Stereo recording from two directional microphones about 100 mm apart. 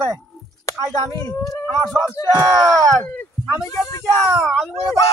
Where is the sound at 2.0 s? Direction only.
35° right (ahead or behind).